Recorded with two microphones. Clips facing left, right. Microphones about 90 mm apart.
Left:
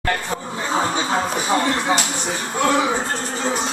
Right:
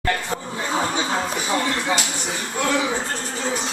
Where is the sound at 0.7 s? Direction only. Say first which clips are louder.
Left 2 dB; 25° left (ahead or behind).